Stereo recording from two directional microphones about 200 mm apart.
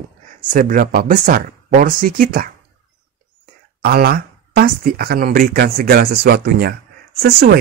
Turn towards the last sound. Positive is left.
turn(degrees=-55)  # may be behind; listen again after turning